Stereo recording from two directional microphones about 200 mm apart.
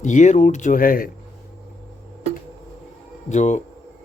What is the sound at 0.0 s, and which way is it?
Speech, 40° left (ahead or behind).